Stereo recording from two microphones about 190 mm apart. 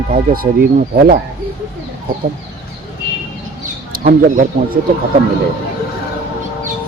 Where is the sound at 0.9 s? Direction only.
55° right (ahead or behind).